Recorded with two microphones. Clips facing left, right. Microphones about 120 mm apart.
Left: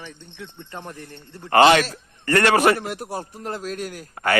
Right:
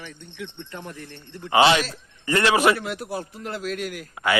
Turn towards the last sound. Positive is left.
turn(degrees=35)  # may be behind; listen again after turning